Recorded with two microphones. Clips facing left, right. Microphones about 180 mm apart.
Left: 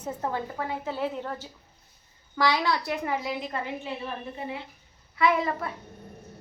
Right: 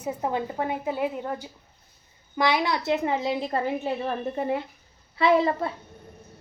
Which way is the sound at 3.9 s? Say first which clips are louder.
Right 7 dB; 45° right (ahead or behind).